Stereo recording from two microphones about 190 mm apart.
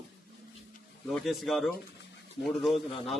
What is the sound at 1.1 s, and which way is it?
A man's voice, centre (ahead or behind).